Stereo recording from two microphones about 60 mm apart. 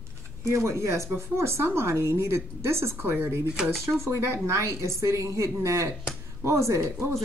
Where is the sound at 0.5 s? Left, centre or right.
Right.